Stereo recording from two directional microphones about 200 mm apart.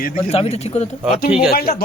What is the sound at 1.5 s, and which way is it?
Speech, 50° left (ahead or behind).